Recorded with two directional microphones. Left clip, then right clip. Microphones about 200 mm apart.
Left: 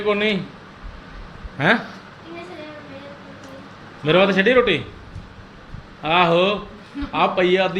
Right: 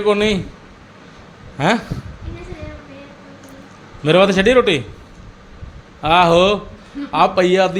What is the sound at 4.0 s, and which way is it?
Speech, 35° right (ahead or behind).